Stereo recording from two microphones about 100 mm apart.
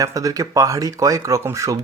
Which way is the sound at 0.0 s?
35° right (ahead or behind).